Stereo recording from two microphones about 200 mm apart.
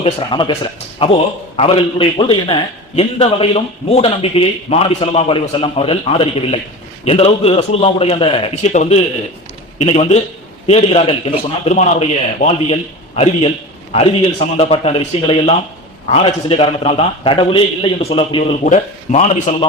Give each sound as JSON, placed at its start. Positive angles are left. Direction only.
{"t": 0.0, "sound": "a man's voice", "side_deg": 25}
{"t": 14.5, "sound": "a man's voice", "side_deg": 30}
{"t": 18.6, "sound": "a man's voice", "side_deg": 40}